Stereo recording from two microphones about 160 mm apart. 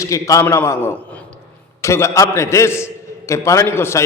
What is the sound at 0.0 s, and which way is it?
A man's voice, 20° left (ahead or behind).